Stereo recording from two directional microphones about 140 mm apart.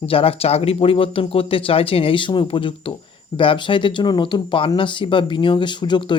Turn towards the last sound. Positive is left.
turn(degrees=35)  # may be behind; listen again after turning